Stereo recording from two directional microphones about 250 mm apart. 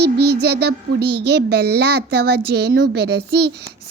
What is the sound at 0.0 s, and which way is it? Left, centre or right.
A child's voice, right.